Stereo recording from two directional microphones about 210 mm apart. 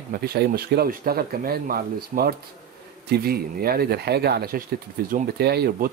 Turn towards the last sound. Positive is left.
turn(degrees=-50)  # may be behind; listen again after turning